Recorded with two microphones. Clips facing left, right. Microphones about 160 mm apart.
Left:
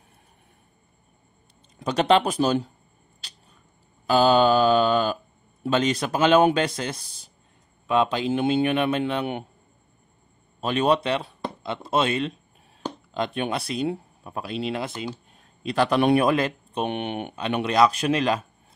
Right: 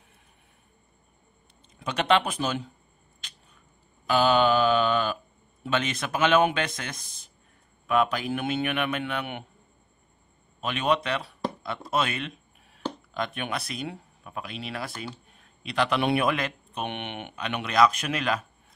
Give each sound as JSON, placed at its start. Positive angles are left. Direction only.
{"t": 1.8, "sound": "speech", "side_deg": 35}
{"t": 3.2, "sound": "a sound", "side_deg": 35}
{"t": 4.1, "sound": "speech", "side_deg": 35}
{"t": 10.6, "sound": "speech", "side_deg": 35}
{"t": 15.3, "sound": "speech", "side_deg": 40}